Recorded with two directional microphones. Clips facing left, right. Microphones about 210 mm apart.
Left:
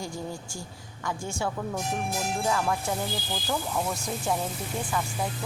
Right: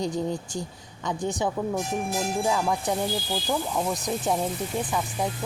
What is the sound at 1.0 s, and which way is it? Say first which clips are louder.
Speech: right 4 dB; 15° right (ahead or behind).